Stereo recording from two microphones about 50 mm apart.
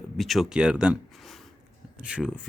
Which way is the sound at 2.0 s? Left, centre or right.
Centre.